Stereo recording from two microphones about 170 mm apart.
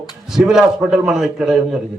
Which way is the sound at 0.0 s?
Centre (ahead or behind).